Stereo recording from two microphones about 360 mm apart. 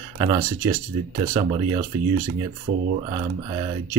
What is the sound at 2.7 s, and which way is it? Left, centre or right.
Speech, right.